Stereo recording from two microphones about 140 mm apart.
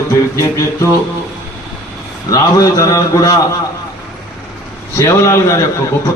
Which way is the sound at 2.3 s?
25° left (ahead or behind).